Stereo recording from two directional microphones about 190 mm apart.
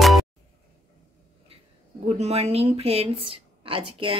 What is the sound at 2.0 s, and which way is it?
A woman's voice, 35° right (ahead or behind).